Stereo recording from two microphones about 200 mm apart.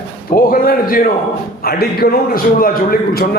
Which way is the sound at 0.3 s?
45° left (ahead or behind).